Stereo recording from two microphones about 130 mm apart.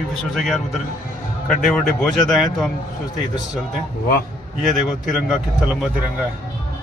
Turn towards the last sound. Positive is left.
turn(degrees=-5)  # may be behind; listen again after turning